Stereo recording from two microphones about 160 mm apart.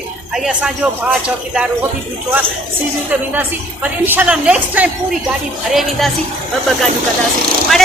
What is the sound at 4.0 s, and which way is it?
A woman's voice, 10° right (ahead or behind).